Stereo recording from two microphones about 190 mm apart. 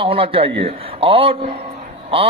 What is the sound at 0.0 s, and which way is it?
A man's voice, 30° right (ahead or behind).